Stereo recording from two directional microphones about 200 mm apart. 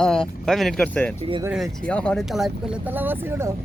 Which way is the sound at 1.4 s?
5° right (ahead or behind).